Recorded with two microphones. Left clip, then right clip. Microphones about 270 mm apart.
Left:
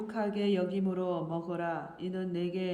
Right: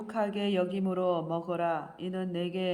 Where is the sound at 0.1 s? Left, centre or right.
Centre.